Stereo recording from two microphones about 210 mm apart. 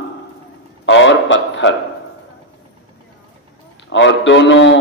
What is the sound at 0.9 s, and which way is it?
Speech, 60° left (ahead or behind).